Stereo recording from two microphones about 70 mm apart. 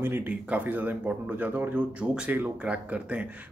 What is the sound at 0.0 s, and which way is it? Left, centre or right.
Speech, right.